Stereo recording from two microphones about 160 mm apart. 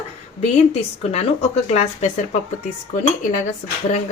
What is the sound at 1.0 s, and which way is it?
Speech, 40° left (ahead or behind).